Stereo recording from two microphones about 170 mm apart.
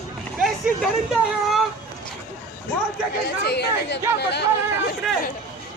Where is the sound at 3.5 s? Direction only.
75° left (ahead or behind).